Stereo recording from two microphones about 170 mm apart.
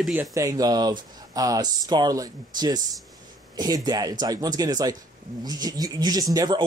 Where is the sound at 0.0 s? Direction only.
5° right (ahead or behind).